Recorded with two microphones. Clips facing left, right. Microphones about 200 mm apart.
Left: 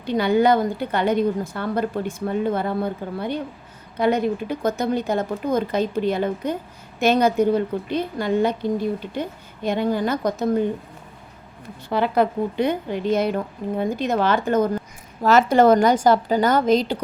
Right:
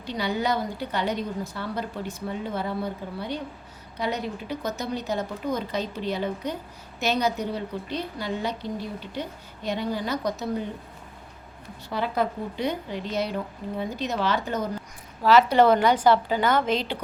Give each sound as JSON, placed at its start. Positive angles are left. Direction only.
{"t": 0.0, "sound": "a woman's voice", "side_deg": 55}
{"t": 11.9, "sound": "a woman's voice", "side_deg": 65}